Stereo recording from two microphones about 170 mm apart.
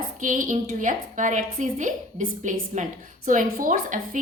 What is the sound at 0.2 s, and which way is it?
A woman's voice, 50° right (ahead or behind).